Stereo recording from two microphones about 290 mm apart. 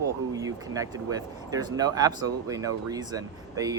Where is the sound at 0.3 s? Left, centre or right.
Centre.